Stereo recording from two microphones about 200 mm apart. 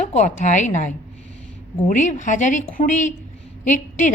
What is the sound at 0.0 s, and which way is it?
Speech, 35° left (ahead or behind).